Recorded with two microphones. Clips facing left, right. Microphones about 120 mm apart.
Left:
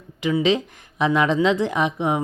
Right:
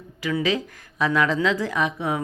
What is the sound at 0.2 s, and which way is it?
Speech, 25° left (ahead or behind).